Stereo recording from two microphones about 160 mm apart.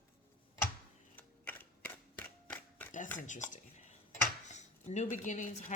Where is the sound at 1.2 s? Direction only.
10° left (ahead or behind).